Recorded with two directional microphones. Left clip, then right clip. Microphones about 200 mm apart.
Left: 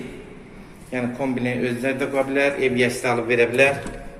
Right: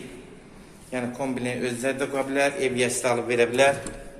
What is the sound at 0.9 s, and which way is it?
A man's voice, 10° right (ahead or behind).